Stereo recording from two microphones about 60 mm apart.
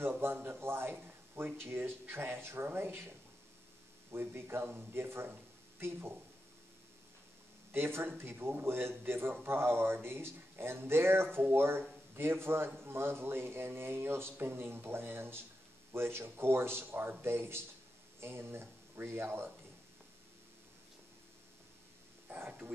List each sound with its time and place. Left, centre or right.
0.2 s a man's voice: right
4.1 s a man's voice: right
7.7 s a man's voice: right
22.3 s a sound: right